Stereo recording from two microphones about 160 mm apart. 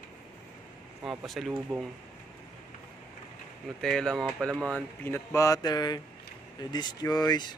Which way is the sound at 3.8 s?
5° left (ahead or behind).